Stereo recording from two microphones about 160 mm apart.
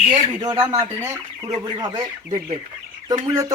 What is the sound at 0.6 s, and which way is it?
Speech, 15° right (ahead or behind).